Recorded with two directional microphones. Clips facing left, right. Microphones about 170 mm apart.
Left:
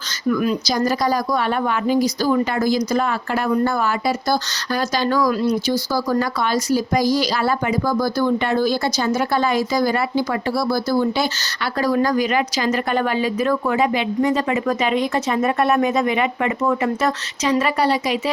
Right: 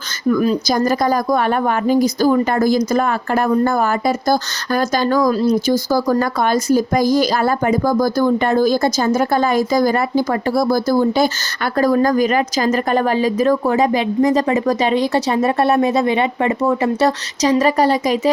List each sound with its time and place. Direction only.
0.3 s speech: 40° right (ahead or behind)
5.3 s speech: 35° right (ahead or behind)
5.6 s speech: 50° right (ahead or behind)